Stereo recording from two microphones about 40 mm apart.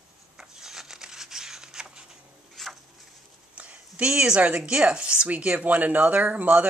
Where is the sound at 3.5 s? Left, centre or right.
Right.